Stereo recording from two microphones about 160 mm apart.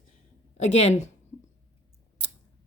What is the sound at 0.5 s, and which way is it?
Speech, 45° left (ahead or behind).